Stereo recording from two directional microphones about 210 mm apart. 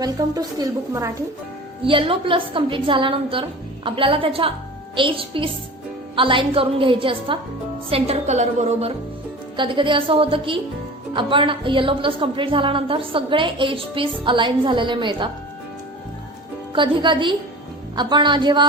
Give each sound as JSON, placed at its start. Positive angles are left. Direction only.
{"t": 0.0, "sound": "a woman's voice", "side_deg": -15}
{"t": 16.7, "sound": "a woman's voice", "side_deg": -25}